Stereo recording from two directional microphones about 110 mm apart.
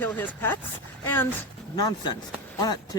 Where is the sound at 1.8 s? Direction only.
40° left (ahead or behind).